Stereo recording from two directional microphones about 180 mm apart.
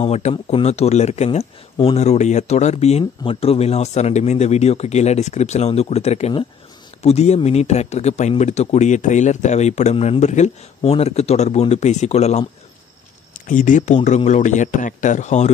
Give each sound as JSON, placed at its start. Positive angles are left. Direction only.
{"t": 0.0, "sound": "speech", "side_deg": 35}
{"t": 13.5, "sound": "speech", "side_deg": 45}